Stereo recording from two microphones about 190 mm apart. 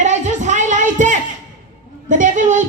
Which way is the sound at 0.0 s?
40° right (ahead or behind).